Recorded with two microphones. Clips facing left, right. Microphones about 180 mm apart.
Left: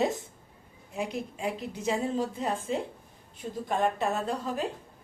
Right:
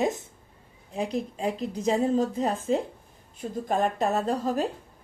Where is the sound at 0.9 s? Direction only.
35° right (ahead or behind).